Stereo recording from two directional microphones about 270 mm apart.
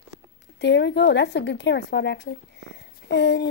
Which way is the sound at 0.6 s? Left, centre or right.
Left.